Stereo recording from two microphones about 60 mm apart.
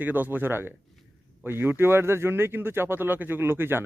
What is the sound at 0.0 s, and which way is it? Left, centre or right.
A man's voice, right.